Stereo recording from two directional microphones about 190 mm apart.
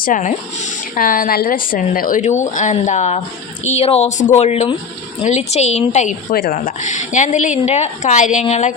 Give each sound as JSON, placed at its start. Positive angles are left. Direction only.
{"t": 0.0, "sound": "a woman's voice", "side_deg": 40}